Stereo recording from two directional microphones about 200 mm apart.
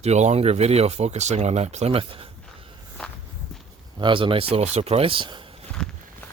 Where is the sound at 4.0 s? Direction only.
25° right (ahead or behind).